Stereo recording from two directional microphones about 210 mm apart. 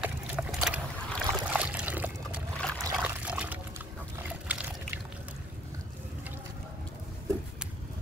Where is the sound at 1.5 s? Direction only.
5° right (ahead or behind).